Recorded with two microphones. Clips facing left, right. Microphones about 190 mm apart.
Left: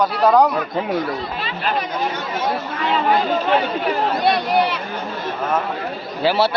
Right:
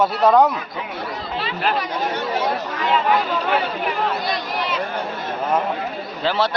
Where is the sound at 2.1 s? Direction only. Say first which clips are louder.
Right 1 dB; 40° right (ahead or behind).